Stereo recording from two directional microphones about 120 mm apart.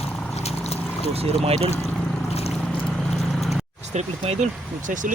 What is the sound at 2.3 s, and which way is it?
Boat, 60° left (ahead or behind).